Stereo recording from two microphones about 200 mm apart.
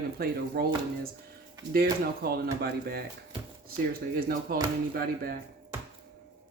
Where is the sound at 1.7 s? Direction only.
50° right (ahead or behind).